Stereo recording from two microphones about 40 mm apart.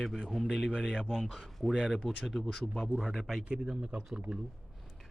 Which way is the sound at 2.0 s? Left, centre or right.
Centre.